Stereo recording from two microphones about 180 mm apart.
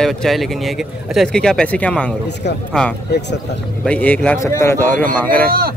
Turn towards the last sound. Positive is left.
turn(degrees=-55)  # may be behind; listen again after turning